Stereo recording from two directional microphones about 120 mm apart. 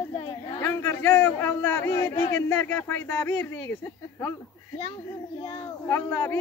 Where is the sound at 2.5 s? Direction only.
20° left (ahead or behind).